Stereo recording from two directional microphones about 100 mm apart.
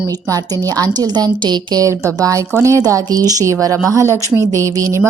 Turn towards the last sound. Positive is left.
turn(degrees=-35)  # may be behind; listen again after turning